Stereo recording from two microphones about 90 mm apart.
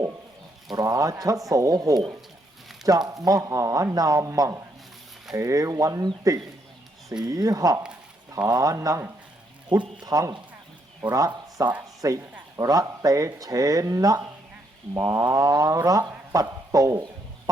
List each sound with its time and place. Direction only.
0.7 s speech: 40° right (ahead or behind)
7.3 s speech: 40° right (ahead or behind)
9.6 s speech: 50° right (ahead or behind)
11.3 s speech: 50° right (ahead or behind)
12.0 s speech: 35° right (ahead or behind)
16.3 s a sound: 40° right (ahead or behind)